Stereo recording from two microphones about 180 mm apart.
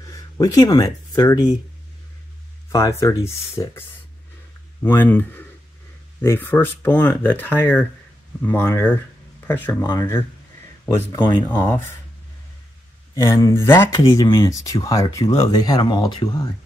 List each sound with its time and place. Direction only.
0.0 s speech: 20° left (ahead or behind)
2.7 s speech: 20° left (ahead or behind)
4.8 s speech: 10° left (ahead or behind)
11.1 s speech: 25° left (ahead or behind)
11.5 s speech: 10° left (ahead or behind)
13.1 s speech: 15° left (ahead or behind)
13.9 s speech: 25° left (ahead or behind)